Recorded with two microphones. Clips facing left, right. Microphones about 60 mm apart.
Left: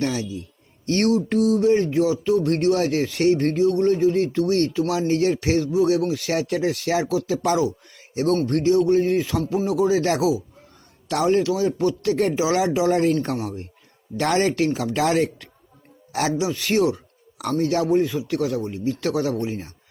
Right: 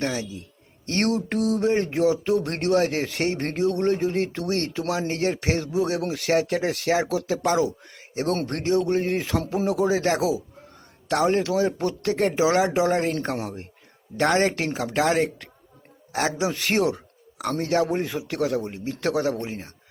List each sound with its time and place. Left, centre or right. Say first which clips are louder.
0.0 s speech: left 3 dB; right
6.0 s speech: even; right
13.3 s speech: left 3 dB; right
16.4 s speech: left 2 dB; right